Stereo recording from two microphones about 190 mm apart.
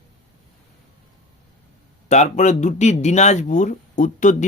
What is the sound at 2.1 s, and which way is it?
A man's voice, 40° left (ahead or behind).